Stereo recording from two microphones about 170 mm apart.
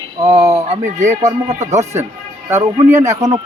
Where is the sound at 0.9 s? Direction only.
45° right (ahead or behind).